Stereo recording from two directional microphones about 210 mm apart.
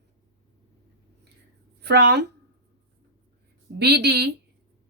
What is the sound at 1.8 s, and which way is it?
Speech, 55° right (ahead or behind).